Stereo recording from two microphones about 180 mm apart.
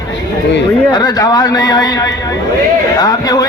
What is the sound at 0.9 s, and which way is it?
A man's voice, 20° left (ahead or behind).